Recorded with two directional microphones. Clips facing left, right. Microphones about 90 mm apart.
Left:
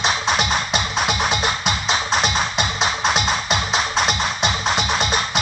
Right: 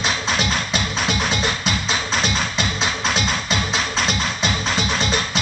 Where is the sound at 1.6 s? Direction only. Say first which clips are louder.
Left 2 dB; 35° left (ahead or behind).